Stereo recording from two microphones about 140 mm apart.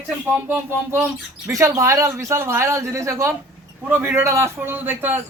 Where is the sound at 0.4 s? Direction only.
15° right (ahead or behind).